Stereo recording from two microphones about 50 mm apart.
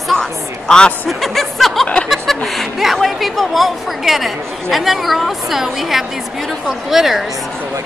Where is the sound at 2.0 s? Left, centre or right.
Centre.